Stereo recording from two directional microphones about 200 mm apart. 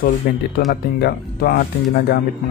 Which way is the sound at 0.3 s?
50° left (ahead or behind).